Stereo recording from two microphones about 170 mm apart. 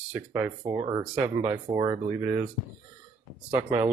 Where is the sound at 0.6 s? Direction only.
25° right (ahead or behind).